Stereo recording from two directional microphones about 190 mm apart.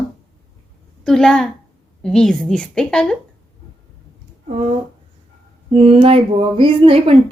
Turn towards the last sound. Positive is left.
turn(degrees=-30)  # may be behind; listen again after turning